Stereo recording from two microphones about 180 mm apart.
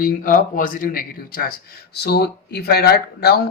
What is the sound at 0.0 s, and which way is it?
Speech, 45° left (ahead or behind).